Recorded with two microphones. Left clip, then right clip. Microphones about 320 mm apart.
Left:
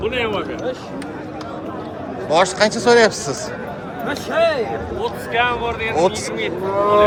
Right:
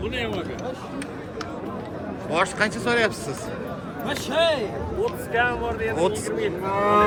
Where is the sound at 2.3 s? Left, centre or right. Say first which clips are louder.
Left 8 dB; centre.